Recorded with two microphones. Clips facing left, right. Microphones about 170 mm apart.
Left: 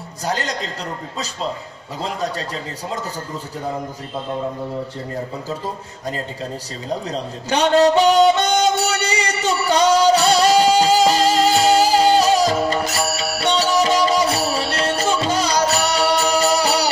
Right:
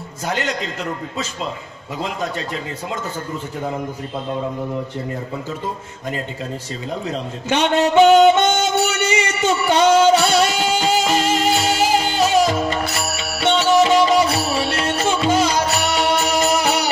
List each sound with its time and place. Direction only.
0.3 s speech: 35° left (ahead or behind)
2.0 s speech: 35° left (ahead or behind)
7.1 s music: 35° left (ahead or behind)